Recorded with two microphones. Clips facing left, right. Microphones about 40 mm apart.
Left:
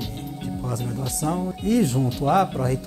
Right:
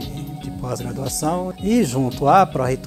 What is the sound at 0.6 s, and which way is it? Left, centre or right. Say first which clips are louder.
Speech: right 5 dB; right.